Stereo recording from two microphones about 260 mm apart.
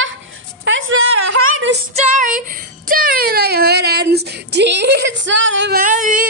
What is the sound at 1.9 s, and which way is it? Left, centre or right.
Speech, right.